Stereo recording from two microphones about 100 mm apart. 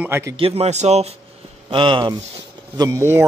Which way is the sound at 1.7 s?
55° right (ahead or behind).